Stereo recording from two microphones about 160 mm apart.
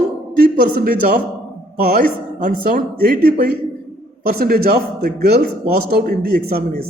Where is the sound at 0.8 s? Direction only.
60° right (ahead or behind).